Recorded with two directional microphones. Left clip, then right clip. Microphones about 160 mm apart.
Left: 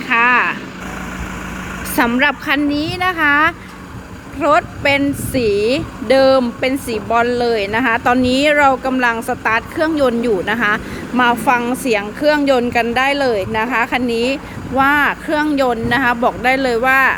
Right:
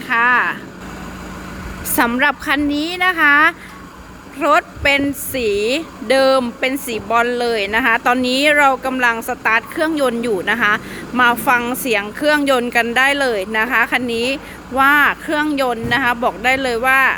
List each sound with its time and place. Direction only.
0.1 s vehicle: 5° left (ahead or behind)
2.0 s speech: 5° right (ahead or behind)